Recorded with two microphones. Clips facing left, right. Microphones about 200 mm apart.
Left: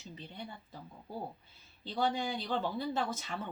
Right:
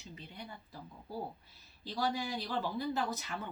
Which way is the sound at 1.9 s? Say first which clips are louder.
Left 2 dB; 25° left (ahead or behind).